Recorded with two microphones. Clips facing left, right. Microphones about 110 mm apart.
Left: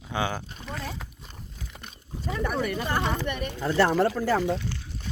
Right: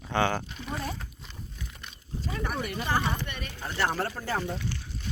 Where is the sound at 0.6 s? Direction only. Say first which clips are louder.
Even; 15° right (ahead or behind).